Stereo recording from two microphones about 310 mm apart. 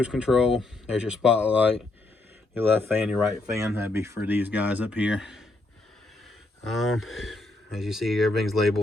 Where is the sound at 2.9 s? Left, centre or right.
Centre.